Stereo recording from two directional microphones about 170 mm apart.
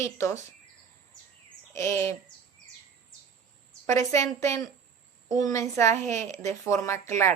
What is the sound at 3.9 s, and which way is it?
Speech, 20° left (ahead or behind).